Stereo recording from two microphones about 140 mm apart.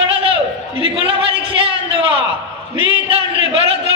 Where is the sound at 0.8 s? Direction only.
40° right (ahead or behind).